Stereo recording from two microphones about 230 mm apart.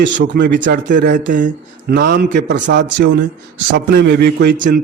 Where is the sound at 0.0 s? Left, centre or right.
Right.